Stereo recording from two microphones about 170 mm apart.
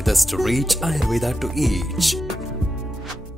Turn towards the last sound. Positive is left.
turn(degrees=0)  # may be behind; listen again after turning